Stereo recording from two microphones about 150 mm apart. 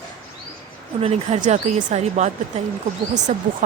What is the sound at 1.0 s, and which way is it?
Speech, 50° right (ahead or behind).